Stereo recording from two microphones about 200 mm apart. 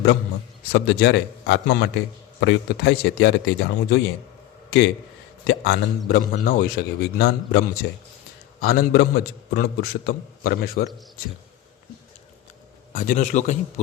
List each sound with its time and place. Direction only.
0.7 s a man's voice: 55° left (ahead or behind)
5.5 s a man's voice: 60° left (ahead or behind)
12.9 s a man's voice: 45° left (ahead or behind)